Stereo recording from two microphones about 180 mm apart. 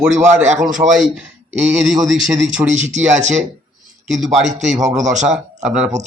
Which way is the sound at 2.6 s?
40° right (ahead or behind).